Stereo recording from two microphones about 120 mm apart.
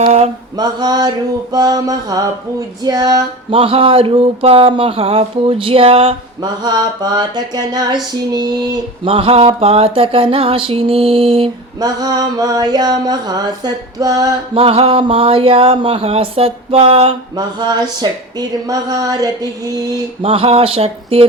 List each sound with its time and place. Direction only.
0.5 s speech: 35° right (ahead or behind)
3.6 s speech: 50° right (ahead or behind)
6.4 s speech: 35° right (ahead or behind)
9.0 s speech: 50° right (ahead or behind)
11.8 s speech: 35° right (ahead or behind)
14.5 s speech: 55° right (ahead or behind)
17.3 s speech: 35° right (ahead or behind)
20.2 s speech: 50° right (ahead or behind)